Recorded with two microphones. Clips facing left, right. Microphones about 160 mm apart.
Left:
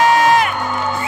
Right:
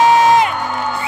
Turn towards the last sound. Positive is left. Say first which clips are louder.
# right 2 dB
turn(degrees=-20)  # may be behind; listen again after turning